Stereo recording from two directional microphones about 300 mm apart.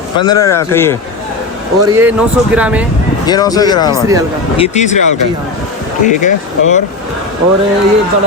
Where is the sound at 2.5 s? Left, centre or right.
Centre.